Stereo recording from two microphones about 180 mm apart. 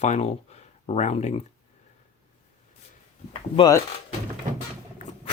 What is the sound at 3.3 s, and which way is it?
Speech, 30° left (ahead or behind).